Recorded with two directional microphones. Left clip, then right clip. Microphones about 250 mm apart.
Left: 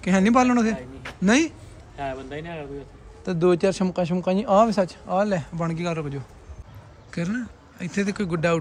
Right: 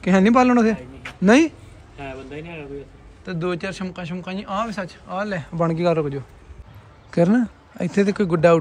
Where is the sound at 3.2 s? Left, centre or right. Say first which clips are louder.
Left 6 dB; centre.